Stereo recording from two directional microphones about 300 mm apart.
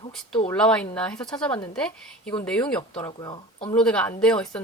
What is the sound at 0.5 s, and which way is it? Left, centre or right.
Speech, centre.